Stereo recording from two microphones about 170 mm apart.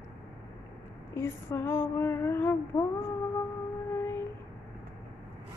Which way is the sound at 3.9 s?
15° left (ahead or behind).